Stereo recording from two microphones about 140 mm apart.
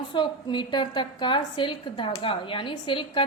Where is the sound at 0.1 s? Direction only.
35° left (ahead or behind).